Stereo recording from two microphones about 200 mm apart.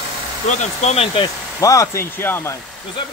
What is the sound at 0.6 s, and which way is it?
Speech, 35° left (ahead or behind).